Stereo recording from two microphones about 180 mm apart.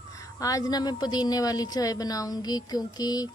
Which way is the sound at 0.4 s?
20° left (ahead or behind).